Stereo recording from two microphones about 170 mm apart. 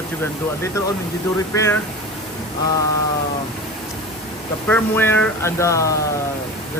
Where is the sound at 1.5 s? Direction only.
15° left (ahead or behind).